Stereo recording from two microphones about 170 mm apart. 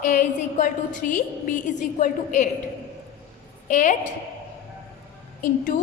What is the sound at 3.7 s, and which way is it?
Speech, 50° left (ahead or behind).